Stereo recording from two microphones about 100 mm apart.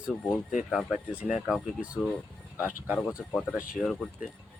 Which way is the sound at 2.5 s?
15° right (ahead or behind).